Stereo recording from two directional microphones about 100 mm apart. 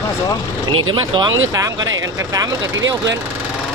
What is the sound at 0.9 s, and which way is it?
Speech, 50° right (ahead or behind).